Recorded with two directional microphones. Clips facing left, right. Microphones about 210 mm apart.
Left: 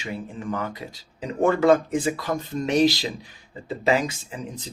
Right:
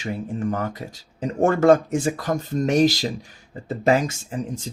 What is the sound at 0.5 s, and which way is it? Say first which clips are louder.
Speech: right 2 dB; 45° right (ahead or behind).